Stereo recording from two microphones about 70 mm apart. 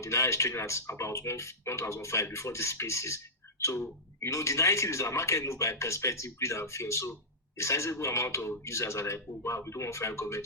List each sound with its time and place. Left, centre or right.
0.0 s speech: left